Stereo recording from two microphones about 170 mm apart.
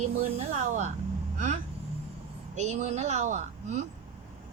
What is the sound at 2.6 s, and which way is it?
A woman's voice, 40° right (ahead or behind).